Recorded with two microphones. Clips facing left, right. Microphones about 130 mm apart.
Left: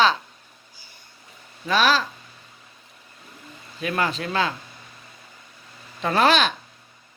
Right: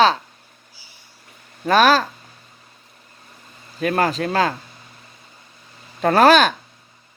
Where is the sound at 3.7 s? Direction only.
45° right (ahead or behind).